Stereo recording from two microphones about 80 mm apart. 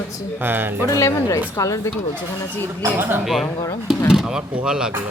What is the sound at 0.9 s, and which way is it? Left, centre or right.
Speech, left.